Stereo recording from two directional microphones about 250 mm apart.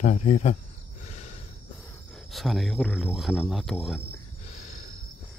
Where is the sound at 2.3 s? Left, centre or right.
Centre.